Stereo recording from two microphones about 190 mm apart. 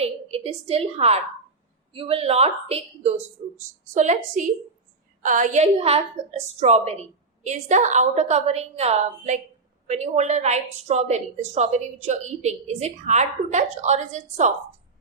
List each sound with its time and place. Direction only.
0.0 s a woman's voice: 30° right (ahead or behind)